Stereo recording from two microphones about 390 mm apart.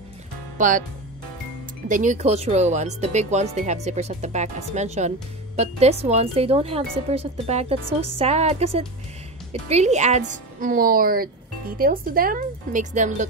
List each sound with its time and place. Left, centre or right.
0.6 s speech: centre
1.9 s a woman's voice: centre